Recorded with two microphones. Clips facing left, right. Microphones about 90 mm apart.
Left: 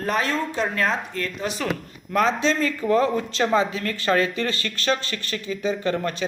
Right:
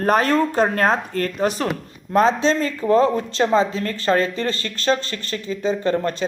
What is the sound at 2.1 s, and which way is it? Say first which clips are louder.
Speech: right 4 dB; 35° right (ahead or behind).